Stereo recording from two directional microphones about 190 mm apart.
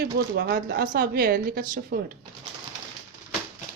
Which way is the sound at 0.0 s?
55° right (ahead or behind).